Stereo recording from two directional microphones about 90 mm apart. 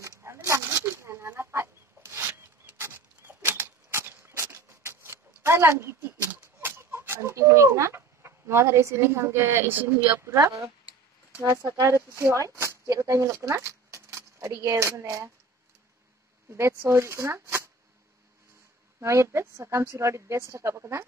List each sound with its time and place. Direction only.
0.0 s a sound: 30° right (ahead or behind)
1.3 s chicken: 30° right (ahead or behind)
3.2 s a sound: 25° right (ahead or behind)
6.6 s speech: 25° right (ahead or behind)
10.1 s a woman's voice: 35° right (ahead or behind)
11.8 s speech: 35° right (ahead or behind)
16.4 s a woman's voice: 30° right (ahead or behind)
18.9 s a woman's voice: 30° right (ahead or behind)